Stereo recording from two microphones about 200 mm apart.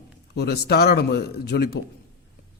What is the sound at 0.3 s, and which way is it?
Speech, 55° left (ahead or behind).